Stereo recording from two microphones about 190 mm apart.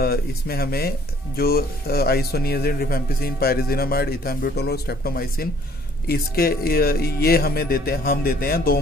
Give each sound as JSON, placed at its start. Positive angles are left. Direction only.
{"t": 0.0, "sound": "speech", "side_deg": 55}